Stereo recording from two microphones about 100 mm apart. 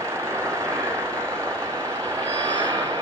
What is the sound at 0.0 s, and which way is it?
Vehicle, 25° right (ahead or behind).